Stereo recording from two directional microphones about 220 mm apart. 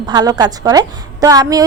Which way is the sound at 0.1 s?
20° right (ahead or behind).